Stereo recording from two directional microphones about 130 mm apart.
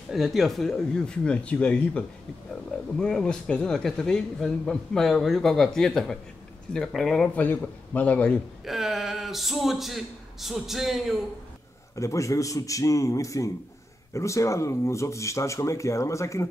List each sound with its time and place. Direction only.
0.1 s a man's voice: centre (ahead or behind)
8.6 s a man's voice: centre (ahead or behind)
11.9 s speech: 25° left (ahead or behind)